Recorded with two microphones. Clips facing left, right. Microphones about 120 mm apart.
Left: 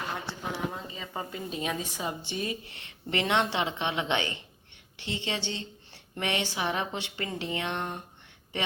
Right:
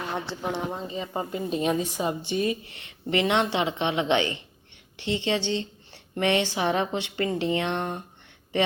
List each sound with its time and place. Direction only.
0.5 s a woman's voice: 25° right (ahead or behind)